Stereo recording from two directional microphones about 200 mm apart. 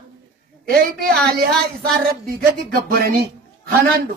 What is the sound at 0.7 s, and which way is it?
Speech, 50° right (ahead or behind).